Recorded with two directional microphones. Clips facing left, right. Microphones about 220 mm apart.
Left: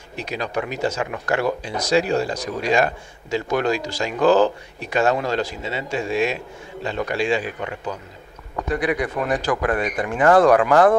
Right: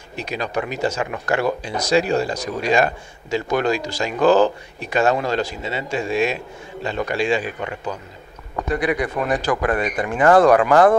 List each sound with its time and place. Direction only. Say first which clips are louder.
0.4 s speech: right 1 dB; 20° right (ahead or behind)
1.9 s speech: right 1 dB; 15° right (ahead or behind)
8.5 s speech: right 1 dB; 20° right (ahead or behind)